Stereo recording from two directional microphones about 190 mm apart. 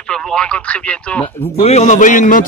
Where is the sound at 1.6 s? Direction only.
35° left (ahead or behind).